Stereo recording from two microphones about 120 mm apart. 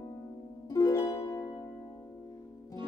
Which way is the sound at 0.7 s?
30° left (ahead or behind).